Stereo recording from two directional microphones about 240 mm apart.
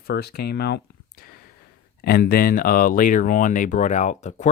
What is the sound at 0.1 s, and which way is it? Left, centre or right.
Speech, left.